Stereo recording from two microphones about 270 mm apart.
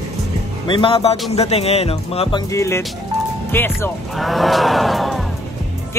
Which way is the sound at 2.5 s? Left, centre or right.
Centre.